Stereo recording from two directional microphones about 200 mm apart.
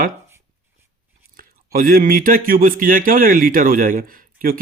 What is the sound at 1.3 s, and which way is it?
Speech, 45° right (ahead or behind).